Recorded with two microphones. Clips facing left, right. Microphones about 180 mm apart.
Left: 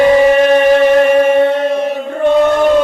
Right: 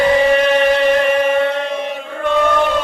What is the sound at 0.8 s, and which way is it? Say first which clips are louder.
Chant: left 5 dB; 45° left (ahead or behind).